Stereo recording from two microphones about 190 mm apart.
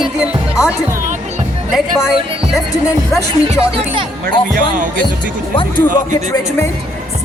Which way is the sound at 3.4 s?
30° right (ahead or behind).